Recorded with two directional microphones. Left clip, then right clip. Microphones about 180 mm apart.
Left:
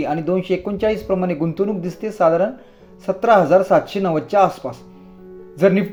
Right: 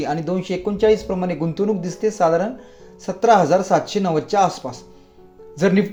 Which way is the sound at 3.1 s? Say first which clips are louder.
Left 1 dB; 25° right (ahead or behind).